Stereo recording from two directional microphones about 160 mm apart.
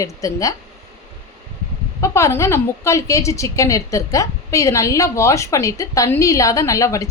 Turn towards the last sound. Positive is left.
turn(degrees=20)  # may be behind; listen again after turning